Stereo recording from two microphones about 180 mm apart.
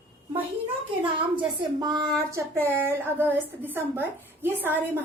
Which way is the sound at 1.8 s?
20° right (ahead or behind).